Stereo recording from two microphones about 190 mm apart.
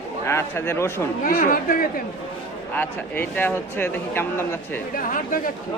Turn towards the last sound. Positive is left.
turn(degrees=45)  # may be behind; listen again after turning